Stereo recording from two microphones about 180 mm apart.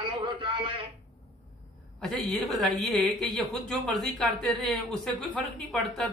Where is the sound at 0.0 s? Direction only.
25° right (ahead or behind).